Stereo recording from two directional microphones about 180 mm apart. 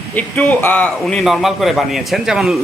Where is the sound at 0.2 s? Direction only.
10° left (ahead or behind).